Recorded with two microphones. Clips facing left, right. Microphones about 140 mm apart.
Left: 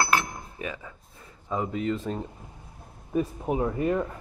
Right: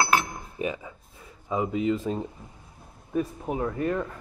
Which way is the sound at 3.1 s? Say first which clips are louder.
Left 1 dB; 15° left (ahead or behind).